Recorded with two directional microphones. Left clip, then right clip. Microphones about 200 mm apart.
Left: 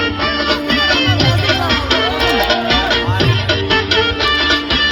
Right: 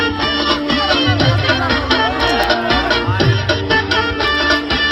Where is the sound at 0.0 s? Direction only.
25° right (ahead or behind).